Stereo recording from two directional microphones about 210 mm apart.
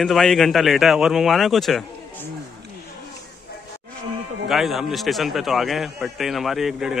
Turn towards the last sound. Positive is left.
turn(degrees=0)  # may be behind; listen again after turning